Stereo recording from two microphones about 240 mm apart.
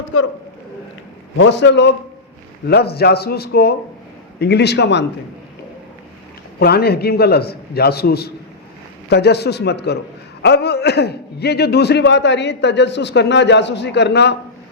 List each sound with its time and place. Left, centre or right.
0.1 s a woman's voice: left
1.4 s a man's voice: left
6.6 s a man's voice: left